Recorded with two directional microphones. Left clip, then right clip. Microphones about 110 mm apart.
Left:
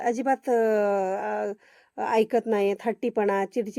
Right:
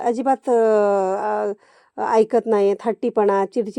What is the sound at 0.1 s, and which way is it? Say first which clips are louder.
Speech: right 6 dB; 25° left (ahead or behind).